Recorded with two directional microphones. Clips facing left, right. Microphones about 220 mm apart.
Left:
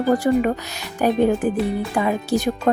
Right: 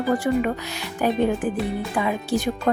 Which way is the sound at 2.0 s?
40° left (ahead or behind).